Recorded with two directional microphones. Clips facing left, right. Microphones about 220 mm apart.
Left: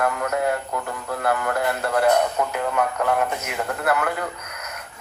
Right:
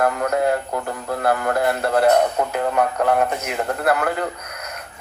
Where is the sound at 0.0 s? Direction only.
35° right (ahead or behind).